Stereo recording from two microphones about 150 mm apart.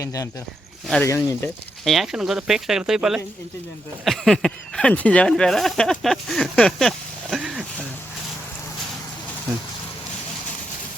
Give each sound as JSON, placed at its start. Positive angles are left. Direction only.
{"t": 0.0, "sound": "speech", "side_deg": 20}
{"t": 1.8, "sound": "speech", "side_deg": 0}